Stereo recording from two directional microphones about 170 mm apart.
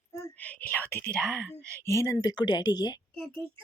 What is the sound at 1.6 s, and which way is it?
Speech, 15° right (ahead or behind).